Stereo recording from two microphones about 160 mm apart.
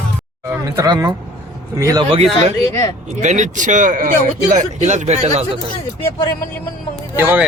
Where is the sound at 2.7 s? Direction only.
20° left (ahead or behind).